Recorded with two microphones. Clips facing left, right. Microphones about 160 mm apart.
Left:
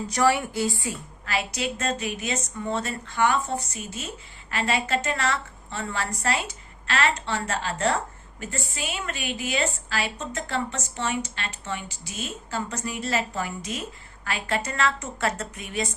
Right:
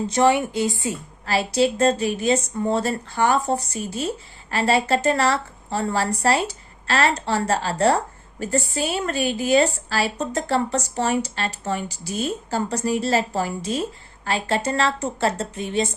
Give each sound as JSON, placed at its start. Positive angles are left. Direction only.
{"t": 0.1, "sound": "a woman's voice", "side_deg": -20}
{"t": 1.2, "sound": "a woman's voice", "side_deg": -35}